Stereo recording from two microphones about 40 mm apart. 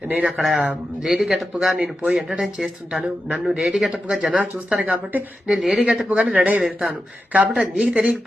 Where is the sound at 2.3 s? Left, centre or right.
Right.